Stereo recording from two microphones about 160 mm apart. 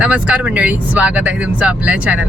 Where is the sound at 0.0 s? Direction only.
10° right (ahead or behind).